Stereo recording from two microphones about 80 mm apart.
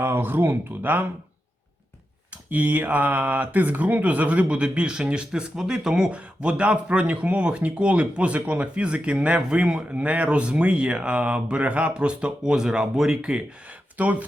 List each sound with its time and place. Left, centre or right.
0.0 s speech: right
2.5 s speech: centre